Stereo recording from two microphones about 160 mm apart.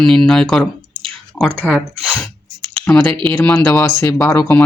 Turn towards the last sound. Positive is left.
turn(degrees=15)  # may be behind; listen again after turning